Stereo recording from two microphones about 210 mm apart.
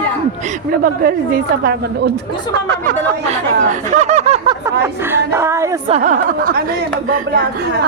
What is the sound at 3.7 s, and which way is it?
Speech, 35° right (ahead or behind).